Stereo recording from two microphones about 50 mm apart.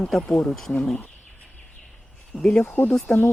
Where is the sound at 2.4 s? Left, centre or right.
Centre.